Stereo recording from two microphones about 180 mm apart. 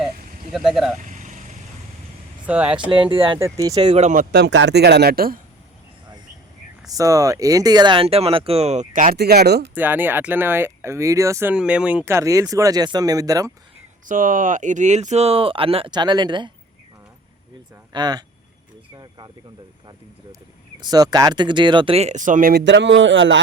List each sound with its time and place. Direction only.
0.5 s speech: centre (ahead or behind)
1.0 s vehicle: 45° right (ahead or behind)
2.5 s speech: 5° right (ahead or behind)
2.9 s speech: 30° right (ahead or behind)
3.3 s speech: 15° right (ahead or behind)
4.0 s speech: 45° right (ahead or behind)
6.9 s speech: 20° right (ahead or behind); by 9.6 s 65° right (ahead or behind)
9.7 s speech: 10° right (ahead or behind)
14.1 s speech: 50° right (ahead or behind); by 16.5 s 25° right (ahead or behind)
17.9 s speech: 25° right (ahead or behind)
20.8 s speech: 20° right (ahead or behind); by 22.6 s 50° right (ahead or behind)
22.6 s speech: 80° right